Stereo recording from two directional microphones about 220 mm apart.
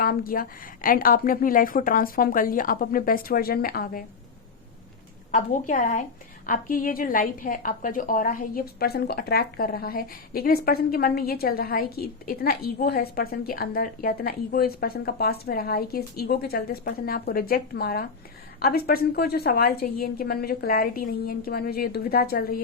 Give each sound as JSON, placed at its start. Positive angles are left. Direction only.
{"t": 0.0, "sound": "a woman's voice", "side_deg": 40}
{"t": 5.3, "sound": "a woman's voice", "side_deg": 35}